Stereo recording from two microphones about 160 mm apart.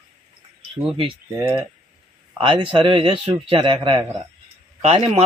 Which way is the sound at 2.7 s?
35° right (ahead or behind).